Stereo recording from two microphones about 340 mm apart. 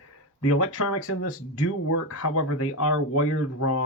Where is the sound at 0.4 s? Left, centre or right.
Left.